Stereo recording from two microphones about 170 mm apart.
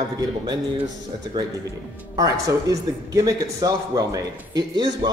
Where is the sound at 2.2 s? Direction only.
20° right (ahead or behind).